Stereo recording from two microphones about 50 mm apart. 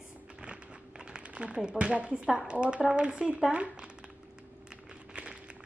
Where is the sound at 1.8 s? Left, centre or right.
Right.